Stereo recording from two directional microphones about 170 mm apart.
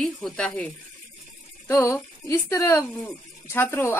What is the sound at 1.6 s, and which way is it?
Speech, 15° left (ahead or behind).